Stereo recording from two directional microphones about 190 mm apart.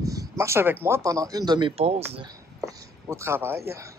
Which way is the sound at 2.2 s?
20° right (ahead or behind).